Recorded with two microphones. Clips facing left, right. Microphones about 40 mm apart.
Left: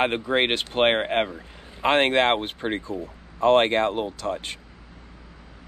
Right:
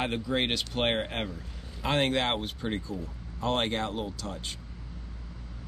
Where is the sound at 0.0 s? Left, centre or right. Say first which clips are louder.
Left 7 dB; left.